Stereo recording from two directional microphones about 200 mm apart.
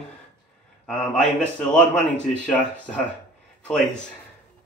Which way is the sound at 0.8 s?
5° left (ahead or behind).